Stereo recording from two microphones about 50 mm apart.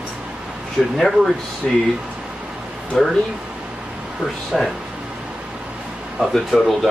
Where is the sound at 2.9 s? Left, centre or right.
Centre.